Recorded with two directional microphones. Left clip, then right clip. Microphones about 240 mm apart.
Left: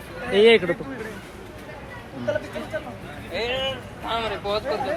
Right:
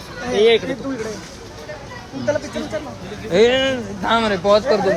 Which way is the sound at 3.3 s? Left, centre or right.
Right.